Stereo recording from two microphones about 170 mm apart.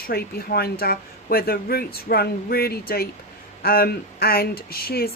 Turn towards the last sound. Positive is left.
turn(degrees=65)  # may be behind; listen again after turning